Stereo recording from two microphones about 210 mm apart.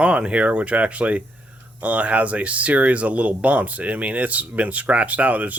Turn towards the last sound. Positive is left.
turn(degrees=-5)  # may be behind; listen again after turning